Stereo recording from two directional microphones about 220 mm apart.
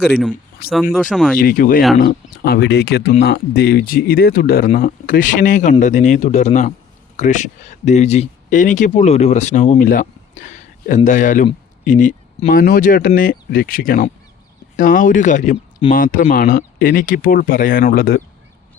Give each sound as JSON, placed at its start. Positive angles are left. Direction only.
{"t": 0.0, "sound": "speech", "side_deg": 0}
{"t": 1.4, "sound": "speech", "side_deg": 40}
{"t": 15.8, "sound": "speech", "side_deg": 25}
{"t": 16.1, "sound": "speech", "side_deg": 40}